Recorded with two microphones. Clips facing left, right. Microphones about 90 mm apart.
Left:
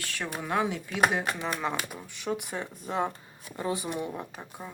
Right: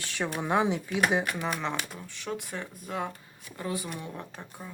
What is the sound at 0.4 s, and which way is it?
Speech, 20° right (ahead or behind).